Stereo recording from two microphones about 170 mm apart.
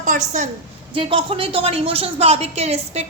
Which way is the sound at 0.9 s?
30° right (ahead or behind).